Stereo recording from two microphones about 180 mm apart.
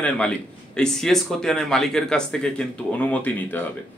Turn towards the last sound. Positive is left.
turn(degrees=10)  # may be behind; listen again after turning